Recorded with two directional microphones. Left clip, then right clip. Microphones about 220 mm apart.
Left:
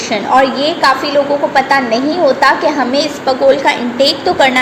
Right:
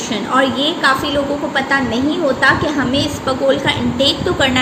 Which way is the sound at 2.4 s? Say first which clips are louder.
Left 4 dB; 15° right (ahead or behind).